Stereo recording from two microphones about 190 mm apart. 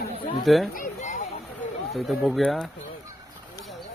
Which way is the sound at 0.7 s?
40° left (ahead or behind).